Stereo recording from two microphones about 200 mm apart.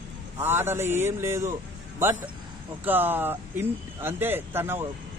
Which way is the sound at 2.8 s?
10° right (ahead or behind).